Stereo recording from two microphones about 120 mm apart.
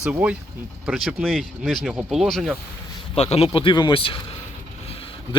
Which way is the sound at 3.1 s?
55° left (ahead or behind).